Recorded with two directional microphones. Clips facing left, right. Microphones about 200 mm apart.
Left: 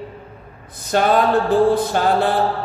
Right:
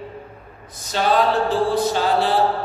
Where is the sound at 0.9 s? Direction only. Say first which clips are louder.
Left 3 dB; 55° left (ahead or behind).